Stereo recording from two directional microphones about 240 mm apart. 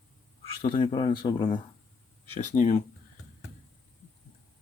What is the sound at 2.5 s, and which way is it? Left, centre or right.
Speech, left.